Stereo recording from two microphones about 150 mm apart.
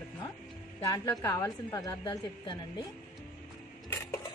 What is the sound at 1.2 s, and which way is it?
Speech, 25° left (ahead or behind).